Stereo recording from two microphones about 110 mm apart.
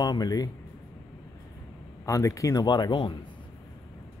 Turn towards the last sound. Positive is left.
turn(degrees=45)  # may be behind; listen again after turning